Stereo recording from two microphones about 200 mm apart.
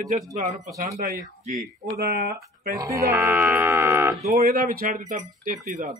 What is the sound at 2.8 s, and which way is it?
Speech, 15° right (ahead or behind).